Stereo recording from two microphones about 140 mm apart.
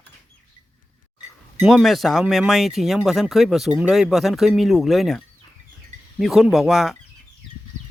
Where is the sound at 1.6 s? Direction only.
Centre (ahead or behind).